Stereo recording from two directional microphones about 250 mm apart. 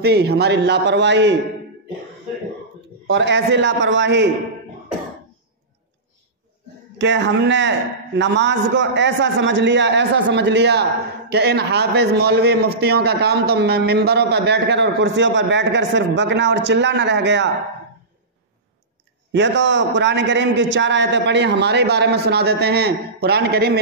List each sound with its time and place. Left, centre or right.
0.0 s a man's voice: right
3.1 s a man's voice: right
7.0 s a man's voice: right
19.3 s a man's voice: right